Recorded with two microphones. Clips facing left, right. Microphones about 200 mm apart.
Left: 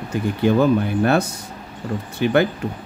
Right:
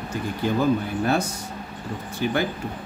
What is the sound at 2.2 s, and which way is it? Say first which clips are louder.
Speech: left 7 dB; 70° left (ahead or behind).